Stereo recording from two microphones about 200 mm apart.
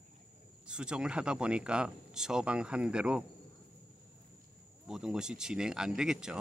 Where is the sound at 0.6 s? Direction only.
5° right (ahead or behind).